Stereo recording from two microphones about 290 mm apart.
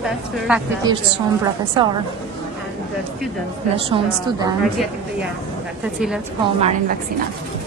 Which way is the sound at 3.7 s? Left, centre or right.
Centre.